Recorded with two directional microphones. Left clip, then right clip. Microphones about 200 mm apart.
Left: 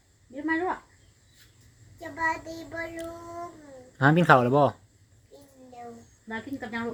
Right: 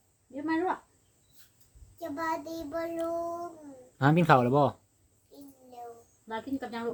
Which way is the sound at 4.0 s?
Centre (ahead or behind).